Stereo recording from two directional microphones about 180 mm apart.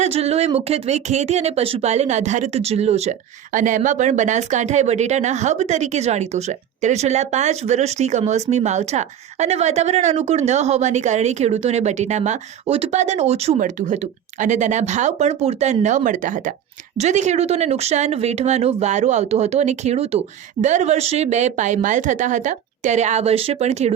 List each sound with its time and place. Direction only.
0.0 s speech: 35° right (ahead or behind)